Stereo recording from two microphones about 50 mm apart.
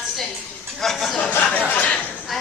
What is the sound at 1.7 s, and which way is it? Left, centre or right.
Dishes, left.